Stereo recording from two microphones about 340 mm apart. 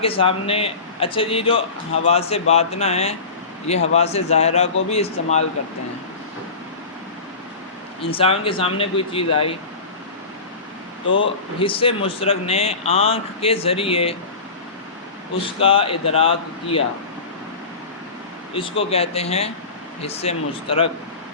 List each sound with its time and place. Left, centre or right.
0.0 s a man's voice: centre
8.0 s a man's voice: centre
11.0 s a man's voice: left
11.6 s a man's voice: centre
15.5 s a man's voice: centre
18.5 s a man's voice: centre